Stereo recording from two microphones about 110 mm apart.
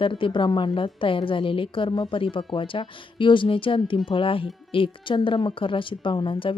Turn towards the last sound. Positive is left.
turn(degrees=50)  # may be behind; listen again after turning